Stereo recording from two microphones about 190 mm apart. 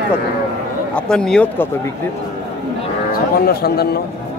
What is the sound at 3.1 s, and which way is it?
Speech, 50° left (ahead or behind).